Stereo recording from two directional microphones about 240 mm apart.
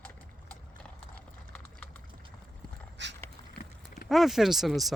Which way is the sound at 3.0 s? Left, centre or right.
Right.